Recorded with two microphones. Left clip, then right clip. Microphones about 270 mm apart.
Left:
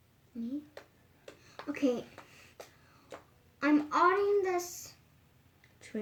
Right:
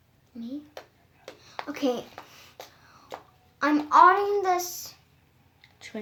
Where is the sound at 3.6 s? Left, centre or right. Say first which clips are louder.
Right 9 dB; right.